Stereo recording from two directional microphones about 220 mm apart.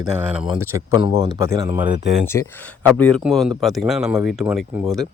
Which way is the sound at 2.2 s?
10° left (ahead or behind).